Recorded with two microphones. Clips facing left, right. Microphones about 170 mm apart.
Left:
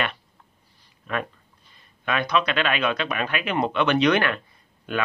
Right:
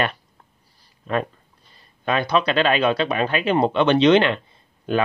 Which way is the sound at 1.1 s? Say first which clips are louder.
Right 5 dB; 35° right (ahead or behind).